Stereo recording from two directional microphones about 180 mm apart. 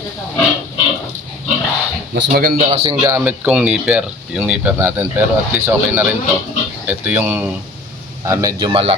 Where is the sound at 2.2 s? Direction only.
65° right (ahead or behind).